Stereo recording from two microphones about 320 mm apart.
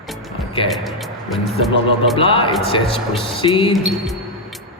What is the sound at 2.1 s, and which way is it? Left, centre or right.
A man's voice, centre.